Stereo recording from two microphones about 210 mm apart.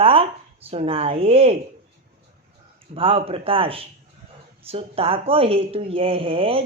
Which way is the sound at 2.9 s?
25° right (ahead or behind).